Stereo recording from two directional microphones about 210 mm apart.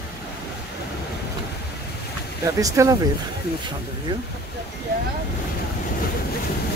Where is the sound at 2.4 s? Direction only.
15° right (ahead or behind).